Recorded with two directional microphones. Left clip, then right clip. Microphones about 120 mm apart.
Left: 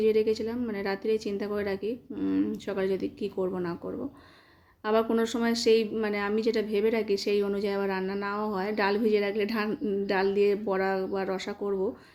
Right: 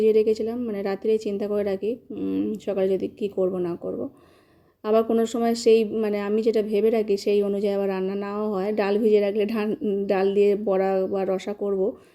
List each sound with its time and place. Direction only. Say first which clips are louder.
0.0 s speech: right 5 dB; 35° right (ahead or behind)
2.1 s speech: right 2 dB; 25° right (ahead or behind)
4.9 s speech: right 5 dB; 30° right (ahead or behind)